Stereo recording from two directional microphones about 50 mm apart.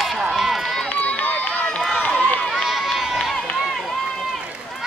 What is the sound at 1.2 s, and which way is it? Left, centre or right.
Run, left.